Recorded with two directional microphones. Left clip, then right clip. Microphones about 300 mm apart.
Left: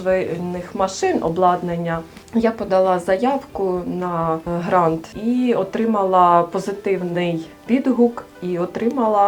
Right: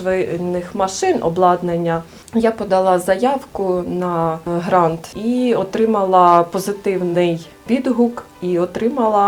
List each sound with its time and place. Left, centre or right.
0.0 s speech: right